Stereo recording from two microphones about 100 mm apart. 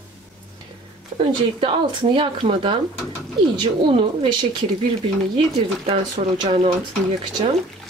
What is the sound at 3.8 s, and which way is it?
Speech, 60° right (ahead or behind).